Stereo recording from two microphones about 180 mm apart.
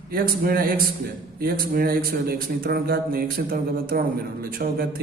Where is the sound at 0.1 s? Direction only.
55° right (ahead or behind).